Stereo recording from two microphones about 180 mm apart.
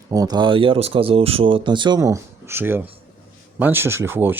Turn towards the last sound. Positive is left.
turn(degrees=-15)  # may be behind; listen again after turning